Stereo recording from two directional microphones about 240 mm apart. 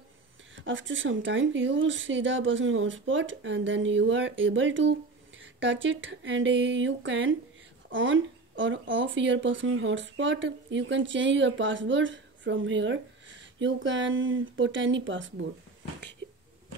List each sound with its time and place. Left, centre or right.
0.6 s speech: right